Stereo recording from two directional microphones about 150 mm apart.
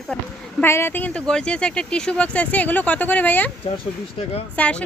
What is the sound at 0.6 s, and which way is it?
Speech, 15° left (ahead or behind).